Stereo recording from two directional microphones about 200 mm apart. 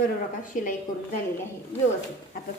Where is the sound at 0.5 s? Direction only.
40° left (ahead or behind).